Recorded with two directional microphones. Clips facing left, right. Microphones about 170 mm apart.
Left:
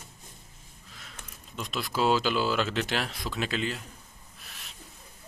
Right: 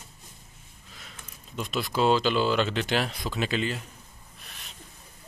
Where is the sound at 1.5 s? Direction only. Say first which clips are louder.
Right 3 dB; centre (ahead or behind).